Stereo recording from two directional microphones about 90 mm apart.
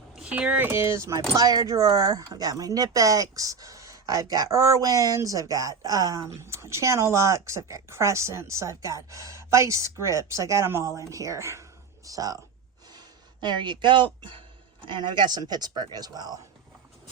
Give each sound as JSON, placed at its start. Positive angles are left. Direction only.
{"t": 0.2, "sound": "speech", "side_deg": -15}
{"t": 0.7, "sound": "speech", "side_deg": -30}
{"t": 1.4, "sound": "speech", "side_deg": -45}
{"t": 12.0, "sound": "speech", "side_deg": -40}
{"t": 13.4, "sound": "speech", "side_deg": -55}